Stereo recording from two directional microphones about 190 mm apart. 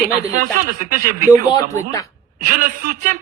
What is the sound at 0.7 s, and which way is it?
Speech, 45° right (ahead or behind).